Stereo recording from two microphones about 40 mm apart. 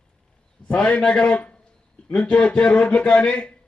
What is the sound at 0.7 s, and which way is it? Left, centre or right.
A man's voice, left.